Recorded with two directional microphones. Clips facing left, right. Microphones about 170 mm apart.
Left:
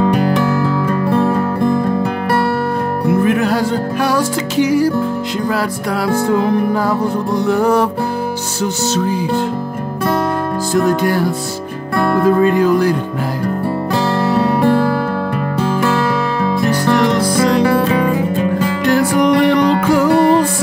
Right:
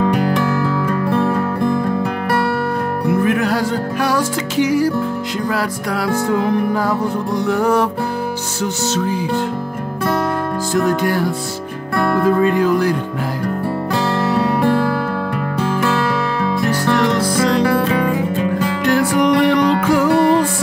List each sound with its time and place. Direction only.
0.0 s music: 30° left (ahead or behind)
10.7 s music: 35° left (ahead or behind)
13.9 s music: 35° left (ahead or behind)
16.9 s music: 15° left (ahead or behind)
17.6 s music: 30° left (ahead or behind)